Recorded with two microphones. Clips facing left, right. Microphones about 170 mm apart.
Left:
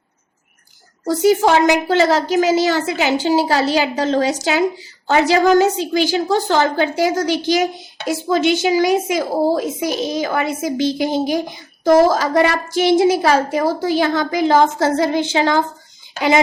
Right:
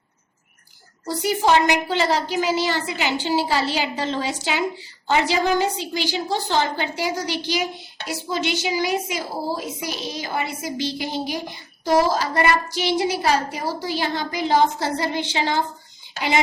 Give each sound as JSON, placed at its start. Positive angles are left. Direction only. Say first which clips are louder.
{"t": 1.4, "sound": "a woman's voice", "louder": "left 4 dB", "side_deg": 45}
{"t": 12.3, "sound": "a woman's voice", "louder": "left 5 dB", "side_deg": 90}
{"t": 12.7, "sound": "a woman's voice", "louder": "left 9 dB", "side_deg": 50}